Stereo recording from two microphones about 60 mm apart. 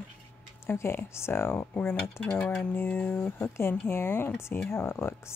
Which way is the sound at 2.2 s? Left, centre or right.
Left.